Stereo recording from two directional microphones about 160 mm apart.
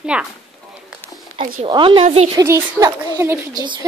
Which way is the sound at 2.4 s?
15° right (ahead or behind).